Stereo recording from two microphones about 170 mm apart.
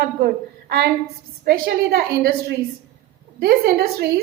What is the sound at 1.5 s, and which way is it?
Speech, 65° right (ahead or behind).